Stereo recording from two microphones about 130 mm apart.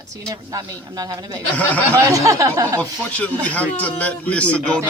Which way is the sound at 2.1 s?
25° right (ahead or behind).